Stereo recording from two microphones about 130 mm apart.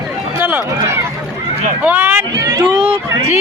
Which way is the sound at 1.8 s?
10° right (ahead or behind).